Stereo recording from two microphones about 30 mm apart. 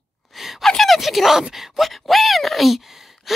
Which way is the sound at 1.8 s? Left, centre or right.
Centre.